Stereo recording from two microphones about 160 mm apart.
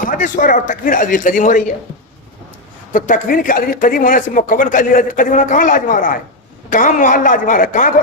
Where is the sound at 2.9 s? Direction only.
55° left (ahead or behind).